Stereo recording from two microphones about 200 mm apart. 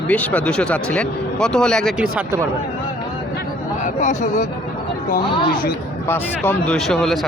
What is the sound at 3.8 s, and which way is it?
Speech, 35° left (ahead or behind).